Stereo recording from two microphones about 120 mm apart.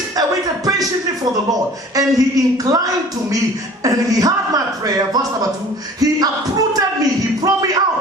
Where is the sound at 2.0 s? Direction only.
30° right (ahead or behind).